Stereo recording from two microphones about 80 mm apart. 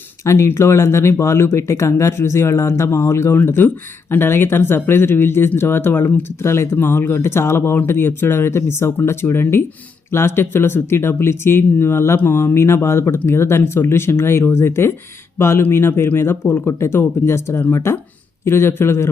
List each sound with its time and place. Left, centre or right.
0.3 s speech: left
3.3 s speech: left